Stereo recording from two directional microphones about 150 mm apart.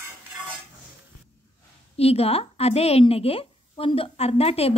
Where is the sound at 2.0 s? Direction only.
40° left (ahead or behind).